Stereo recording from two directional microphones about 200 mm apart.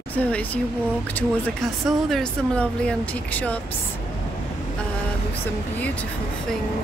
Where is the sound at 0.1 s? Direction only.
10° left (ahead or behind).